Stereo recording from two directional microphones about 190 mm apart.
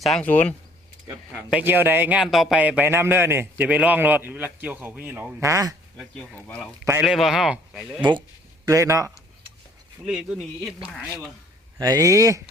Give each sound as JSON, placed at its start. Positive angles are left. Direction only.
{"t": 0.0, "sound": "speech", "side_deg": 5}
{"t": 1.3, "sound": "a man's voice", "side_deg": -5}
{"t": 6.0, "sound": "speech", "side_deg": 5}
{"t": 8.6, "sound": "a man's voice", "side_deg": -15}
{"t": 10.1, "sound": "speech", "side_deg": -5}
{"t": 11.8, "sound": "a man's voice", "side_deg": -20}